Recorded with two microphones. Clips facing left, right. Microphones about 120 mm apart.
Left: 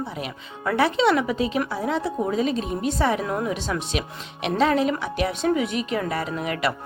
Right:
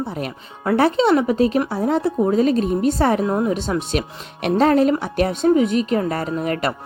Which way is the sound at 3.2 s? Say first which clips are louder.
Right 6 dB; 25° right (ahead or behind).